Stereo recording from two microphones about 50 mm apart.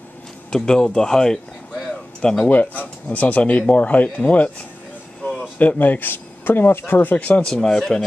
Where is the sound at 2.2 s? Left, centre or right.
Left.